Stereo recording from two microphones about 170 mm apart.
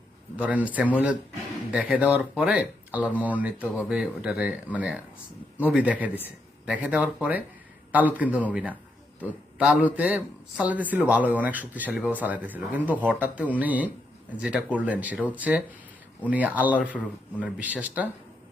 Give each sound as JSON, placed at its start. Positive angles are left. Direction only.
{"t": 0.3, "sound": "a man's voice", "side_deg": -10}